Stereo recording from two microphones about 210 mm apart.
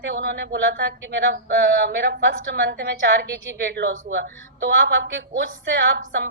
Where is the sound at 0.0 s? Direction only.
55° right (ahead or behind).